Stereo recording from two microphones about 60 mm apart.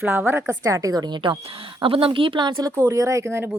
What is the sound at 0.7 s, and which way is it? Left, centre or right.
Speech, right.